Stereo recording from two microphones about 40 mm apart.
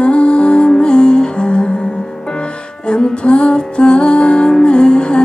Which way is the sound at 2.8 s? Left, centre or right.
Left.